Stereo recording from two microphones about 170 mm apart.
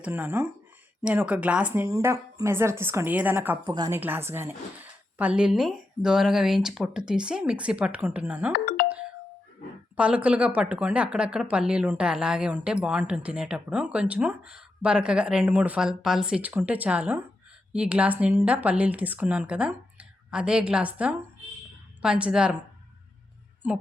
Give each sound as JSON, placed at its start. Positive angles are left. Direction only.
{"t": 0.0, "sound": "speech", "side_deg": -10}
{"t": 8.5, "sound": "music", "side_deg": 60}
{"t": 10.0, "sound": "a woman's voice", "side_deg": -5}